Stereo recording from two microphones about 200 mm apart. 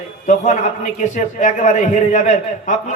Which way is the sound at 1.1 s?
40° left (ahead or behind).